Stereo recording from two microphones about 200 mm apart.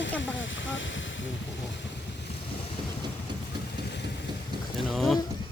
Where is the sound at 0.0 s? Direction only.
65° left (ahead or behind).